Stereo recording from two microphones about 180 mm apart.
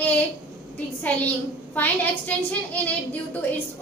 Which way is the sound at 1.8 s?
10° left (ahead or behind).